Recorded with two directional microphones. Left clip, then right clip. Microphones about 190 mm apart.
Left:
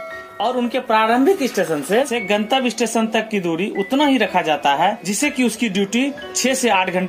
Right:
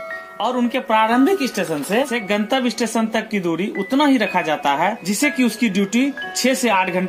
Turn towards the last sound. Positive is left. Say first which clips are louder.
# left 1 dB
turn(degrees=10)  # may be behind; listen again after turning